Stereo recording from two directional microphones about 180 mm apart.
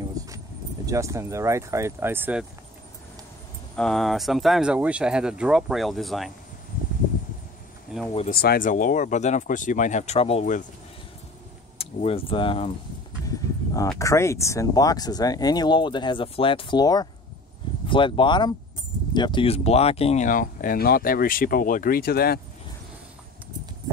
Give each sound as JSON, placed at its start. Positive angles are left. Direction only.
{"t": 0.2, "sound": "a sound", "side_deg": -20}
{"t": 0.8, "sound": "speech", "side_deg": -15}
{"t": 3.7, "sound": "speech", "side_deg": 5}
{"t": 7.9, "sound": "speech", "side_deg": -5}
{"t": 8.3, "sound": "speech", "side_deg": 55}
{"t": 11.8, "sound": "speech", "side_deg": 35}
{"t": 13.9, "sound": "speech", "side_deg": 15}